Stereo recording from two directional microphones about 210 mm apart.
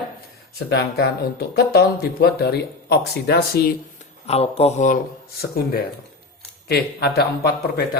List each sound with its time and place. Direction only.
0.7 s speech: 50° left (ahead or behind)
4.3 s speech: 30° left (ahead or behind); by 7.9 s 50° left (ahead or behind)